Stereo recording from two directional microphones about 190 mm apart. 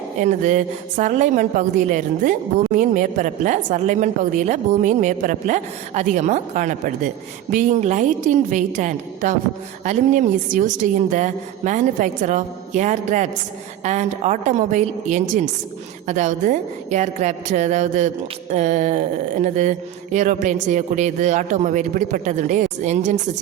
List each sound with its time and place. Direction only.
0.2 s speech: 40° right (ahead or behind)